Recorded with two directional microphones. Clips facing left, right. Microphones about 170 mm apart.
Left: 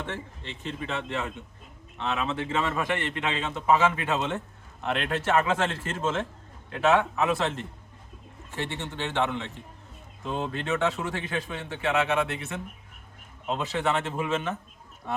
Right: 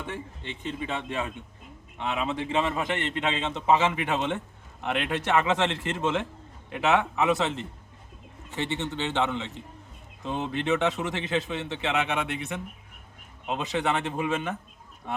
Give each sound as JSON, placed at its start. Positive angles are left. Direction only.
{"t": 0.0, "sound": "a man's voice", "side_deg": -15}